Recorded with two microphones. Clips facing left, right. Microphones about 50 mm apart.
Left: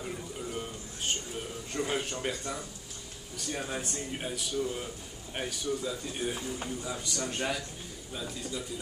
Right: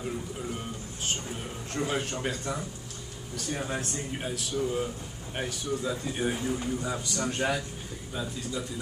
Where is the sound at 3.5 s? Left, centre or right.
Centre.